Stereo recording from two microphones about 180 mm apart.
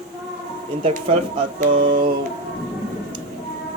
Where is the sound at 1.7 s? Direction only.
30° right (ahead or behind).